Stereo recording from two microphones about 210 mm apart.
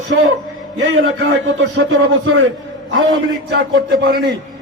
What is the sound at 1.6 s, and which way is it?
Speech, 60° right (ahead or behind).